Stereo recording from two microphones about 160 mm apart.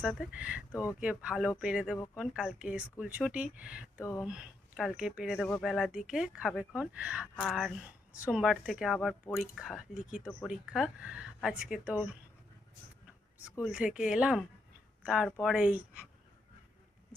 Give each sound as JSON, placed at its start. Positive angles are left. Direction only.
{"t": 0.0, "sound": "speech", "side_deg": -5}
{"t": 4.0, "sound": "speech", "side_deg": 20}
{"t": 4.3, "sound": "speech", "side_deg": -5}
{"t": 13.7, "sound": "speech", "side_deg": -5}